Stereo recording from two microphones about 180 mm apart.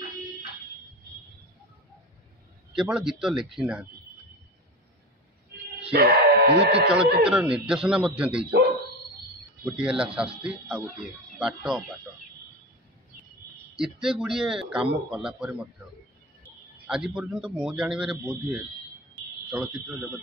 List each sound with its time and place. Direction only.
2.7 s a man's voice: 5° right (ahead or behind)
5.9 s speech: 65° right (ahead or behind)
7.2 s a man's voice: 5° right (ahead or behind)
9.7 s a man's voice: 5° right (ahead or behind)
14.0 s a man's voice: 5° right (ahead or behind)
16.8 s a man's voice: 5° right (ahead or behind)
19.1 s smoke detector: 5° right (ahead or behind)